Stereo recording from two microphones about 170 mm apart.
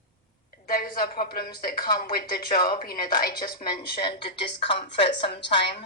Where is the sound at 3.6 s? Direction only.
65° left (ahead or behind).